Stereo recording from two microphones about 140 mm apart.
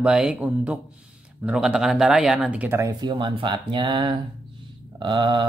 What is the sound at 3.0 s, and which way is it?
Speech, 35° right (ahead or behind).